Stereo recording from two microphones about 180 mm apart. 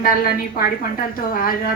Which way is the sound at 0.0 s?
55° left (ahead or behind).